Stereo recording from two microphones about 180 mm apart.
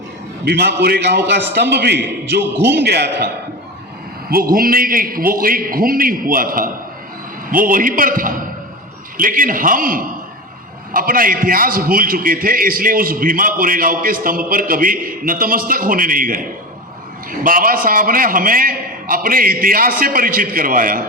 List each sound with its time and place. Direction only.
0.4 s a man's voice: 65° right (ahead or behind)
4.3 s a man's voice: 55° right (ahead or behind)
17.4 s a man's voice: 50° right (ahead or behind)